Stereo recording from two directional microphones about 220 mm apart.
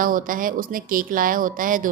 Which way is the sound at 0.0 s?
40° right (ahead or behind).